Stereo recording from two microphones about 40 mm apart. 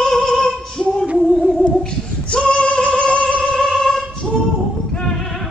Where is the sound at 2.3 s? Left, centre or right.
Left.